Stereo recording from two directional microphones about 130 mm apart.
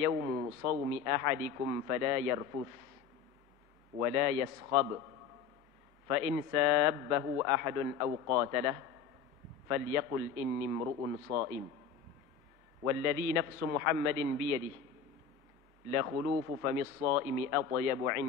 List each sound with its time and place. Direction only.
0.0 s a man's voice: 25° right (ahead or behind)
3.9 s a man's voice: 25° right (ahead or behind)
6.0 s a man's voice: 20° right (ahead or behind)
12.8 s a man's voice: 20° right (ahead or behind)
15.9 s a man's voice: 20° right (ahead or behind)